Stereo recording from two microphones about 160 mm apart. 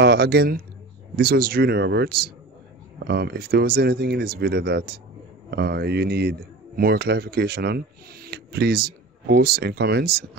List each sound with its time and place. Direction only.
0.0 s speech: 90° right